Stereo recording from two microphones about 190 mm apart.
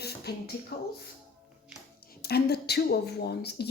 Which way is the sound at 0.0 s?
55° left (ahead or behind).